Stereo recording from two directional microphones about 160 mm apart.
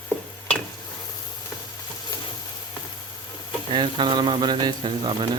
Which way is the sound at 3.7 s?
30° right (ahead or behind).